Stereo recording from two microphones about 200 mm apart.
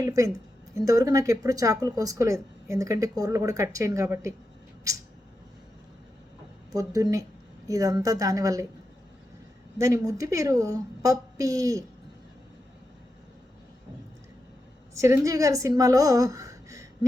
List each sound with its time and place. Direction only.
0.0 s speech: 15° right (ahead or behind)
6.7 s speech: 15° right (ahead or behind)
9.7 s speech: 15° right (ahead or behind)
14.9 s a woman's voice: 15° right (ahead or behind)